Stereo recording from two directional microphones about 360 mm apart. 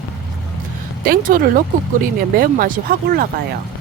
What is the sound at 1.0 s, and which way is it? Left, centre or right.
Speech, right.